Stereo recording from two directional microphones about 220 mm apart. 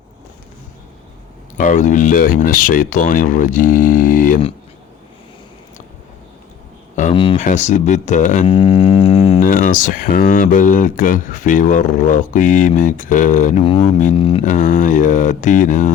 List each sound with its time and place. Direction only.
1.5 s speech: 35° left (ahead or behind)
6.9 s a sound: 35° left (ahead or behind)
7.3 s speech: 35° left (ahead or behind)
8.4 s a sound: 25° left (ahead or behind)
9.4 s speech: 40° left (ahead or behind)
14.4 s speech: 35° left (ahead or behind)